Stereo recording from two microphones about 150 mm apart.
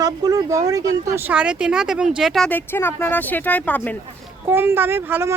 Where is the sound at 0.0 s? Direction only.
25° right (ahead or behind).